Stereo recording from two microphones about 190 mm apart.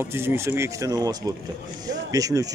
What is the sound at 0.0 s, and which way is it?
Speech, 10° right (ahead or behind).